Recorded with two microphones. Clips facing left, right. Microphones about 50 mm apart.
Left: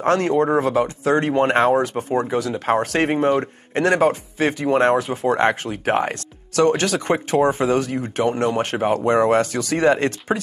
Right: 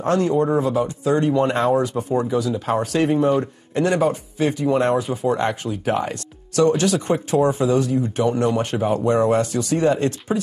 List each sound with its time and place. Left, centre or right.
0.0 s speech: left